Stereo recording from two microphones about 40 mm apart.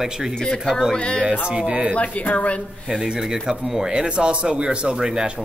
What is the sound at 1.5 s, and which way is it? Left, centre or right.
Speech, right.